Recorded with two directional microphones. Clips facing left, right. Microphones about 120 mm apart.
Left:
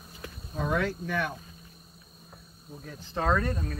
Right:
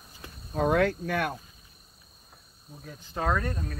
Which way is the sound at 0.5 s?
55° right (ahead or behind).